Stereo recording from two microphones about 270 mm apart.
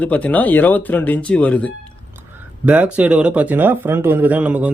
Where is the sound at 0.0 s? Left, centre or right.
Centre.